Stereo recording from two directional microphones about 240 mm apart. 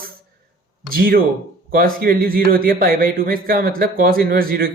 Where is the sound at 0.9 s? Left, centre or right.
Right.